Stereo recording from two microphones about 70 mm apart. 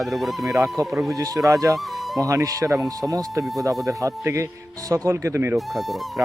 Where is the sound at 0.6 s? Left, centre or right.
Right.